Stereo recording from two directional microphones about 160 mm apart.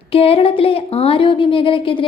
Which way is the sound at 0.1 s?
35° left (ahead or behind).